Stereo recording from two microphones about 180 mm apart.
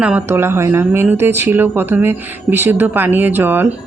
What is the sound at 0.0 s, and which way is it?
Speech, 10° right (ahead or behind).